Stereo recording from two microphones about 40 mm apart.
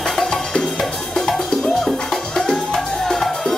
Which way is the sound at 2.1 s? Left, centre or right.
Centre.